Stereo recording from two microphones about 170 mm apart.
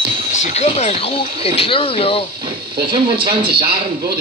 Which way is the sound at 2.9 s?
30° right (ahead or behind).